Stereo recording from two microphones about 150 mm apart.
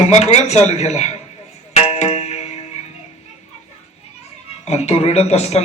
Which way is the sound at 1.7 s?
45° left (ahead or behind).